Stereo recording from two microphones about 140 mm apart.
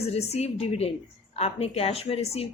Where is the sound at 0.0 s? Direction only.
50° left (ahead or behind).